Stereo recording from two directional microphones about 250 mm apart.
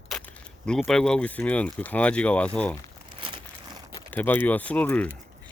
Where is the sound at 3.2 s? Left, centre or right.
Centre.